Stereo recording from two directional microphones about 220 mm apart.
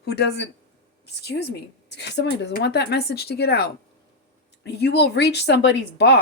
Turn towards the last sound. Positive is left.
turn(degrees=50)  # may be behind; listen again after turning